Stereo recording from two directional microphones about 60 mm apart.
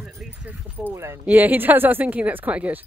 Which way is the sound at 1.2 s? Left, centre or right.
Right.